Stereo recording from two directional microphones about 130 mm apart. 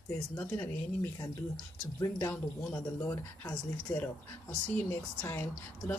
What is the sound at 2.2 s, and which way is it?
Speech, 15° left (ahead or behind).